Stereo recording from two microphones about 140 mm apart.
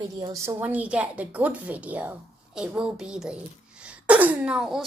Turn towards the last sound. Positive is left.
turn(degrees=-5)  # may be behind; listen again after turning